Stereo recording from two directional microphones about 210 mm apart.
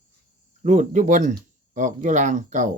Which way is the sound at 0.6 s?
35° right (ahead or behind).